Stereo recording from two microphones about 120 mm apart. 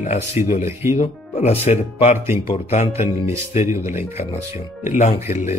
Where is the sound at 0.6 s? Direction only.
20° right (ahead or behind).